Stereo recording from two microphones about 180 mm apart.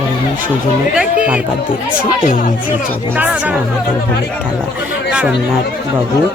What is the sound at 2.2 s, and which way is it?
Speech, 45° left (ahead or behind).